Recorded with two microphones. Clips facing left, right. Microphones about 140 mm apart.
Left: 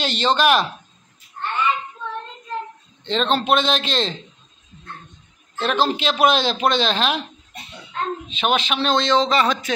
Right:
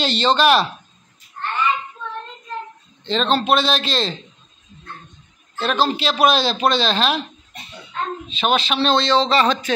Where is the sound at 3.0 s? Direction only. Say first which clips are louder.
Right 1 dB; 20° left (ahead or behind).